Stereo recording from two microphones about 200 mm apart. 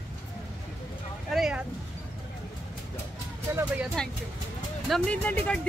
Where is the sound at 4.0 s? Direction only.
5° left (ahead or behind).